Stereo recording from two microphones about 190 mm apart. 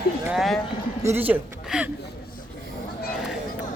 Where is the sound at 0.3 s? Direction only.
Centre (ahead or behind).